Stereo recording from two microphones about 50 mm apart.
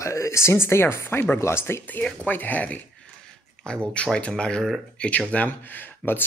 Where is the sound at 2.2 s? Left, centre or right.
Left.